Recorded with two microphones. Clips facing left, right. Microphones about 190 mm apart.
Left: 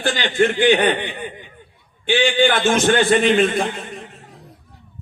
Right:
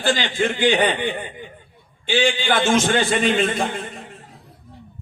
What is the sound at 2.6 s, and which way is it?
Speech, 55° left (ahead or behind).